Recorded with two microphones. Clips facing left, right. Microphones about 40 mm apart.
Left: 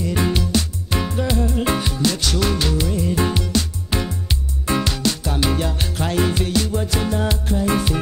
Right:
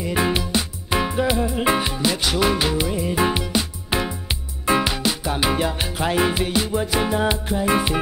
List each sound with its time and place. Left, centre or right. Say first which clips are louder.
0.0 s music: even; centre